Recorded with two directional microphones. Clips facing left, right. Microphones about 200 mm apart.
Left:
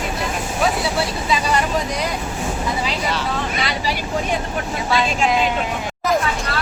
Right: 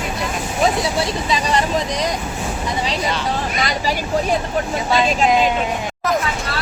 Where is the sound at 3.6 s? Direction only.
45° right (ahead or behind).